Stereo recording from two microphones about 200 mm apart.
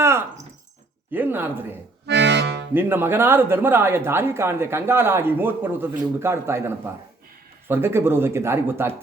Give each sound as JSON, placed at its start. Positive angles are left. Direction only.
{"t": 0.0, "sound": "a sound", "side_deg": -15}
{"t": 1.1, "sound": "speech", "side_deg": -10}
{"t": 2.0, "sound": "accordion", "side_deg": -60}
{"t": 2.7, "sound": "speech", "side_deg": -10}